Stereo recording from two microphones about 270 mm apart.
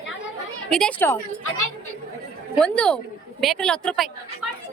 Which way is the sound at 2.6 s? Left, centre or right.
Centre.